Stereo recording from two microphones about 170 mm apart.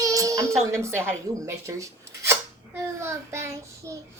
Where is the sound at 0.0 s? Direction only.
20° right (ahead or behind).